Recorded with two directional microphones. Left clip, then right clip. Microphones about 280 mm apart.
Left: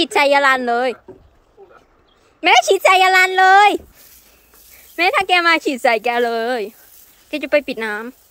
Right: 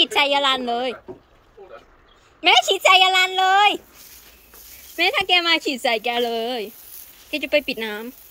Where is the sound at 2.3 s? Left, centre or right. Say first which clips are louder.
Left 4 dB; centre.